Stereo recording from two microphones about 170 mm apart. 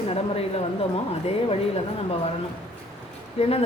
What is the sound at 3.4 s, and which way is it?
Speech, 35° left (ahead or behind).